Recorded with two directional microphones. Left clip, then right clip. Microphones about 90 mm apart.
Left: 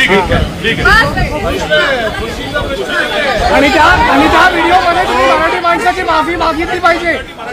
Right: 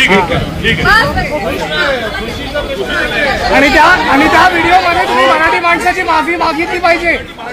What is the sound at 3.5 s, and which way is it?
Speech, 70° right (ahead or behind).